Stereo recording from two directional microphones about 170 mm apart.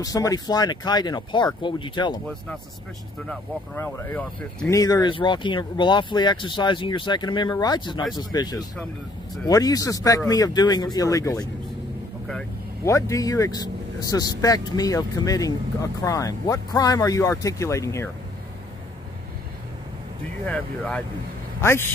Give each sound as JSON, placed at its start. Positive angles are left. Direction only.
{"t": 0.0, "sound": "speech", "side_deg": 20}
{"t": 3.7, "sound": "speech", "side_deg": 10}
{"t": 4.6, "sound": "speech", "side_deg": 20}
{"t": 12.8, "sound": "speech", "side_deg": 20}
{"t": 20.4, "sound": "a man's voice", "side_deg": 5}